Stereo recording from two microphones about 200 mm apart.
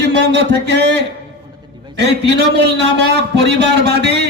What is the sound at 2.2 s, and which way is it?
A man's voice, 55° right (ahead or behind).